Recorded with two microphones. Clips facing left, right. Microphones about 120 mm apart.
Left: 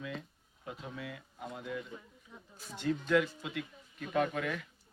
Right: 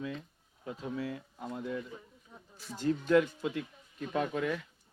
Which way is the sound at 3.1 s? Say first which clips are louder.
Right 4 dB; 35° right (ahead or behind).